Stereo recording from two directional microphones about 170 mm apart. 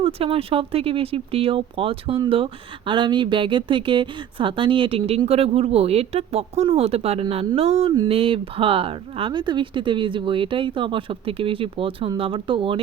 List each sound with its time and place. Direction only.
0.0 s speech: 35° right (ahead or behind)